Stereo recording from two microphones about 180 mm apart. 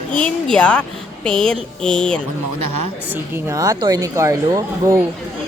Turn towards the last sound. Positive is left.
turn(degrees=-20)  # may be behind; listen again after turning